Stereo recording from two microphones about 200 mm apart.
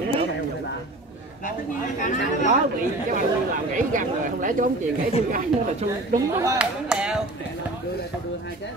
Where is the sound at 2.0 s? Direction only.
40° left (ahead or behind).